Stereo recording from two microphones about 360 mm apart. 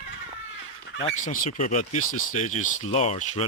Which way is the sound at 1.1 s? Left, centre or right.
Centre.